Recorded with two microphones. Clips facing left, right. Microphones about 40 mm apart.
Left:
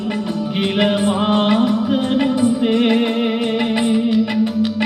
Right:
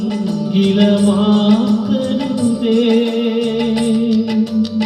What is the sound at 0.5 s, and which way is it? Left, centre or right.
Music, left.